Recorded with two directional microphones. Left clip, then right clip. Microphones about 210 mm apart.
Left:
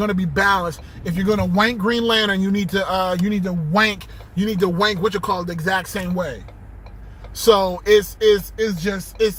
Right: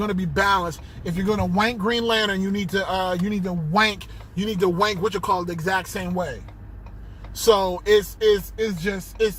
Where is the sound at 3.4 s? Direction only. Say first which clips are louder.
Left 2 dB; 20° left (ahead or behind).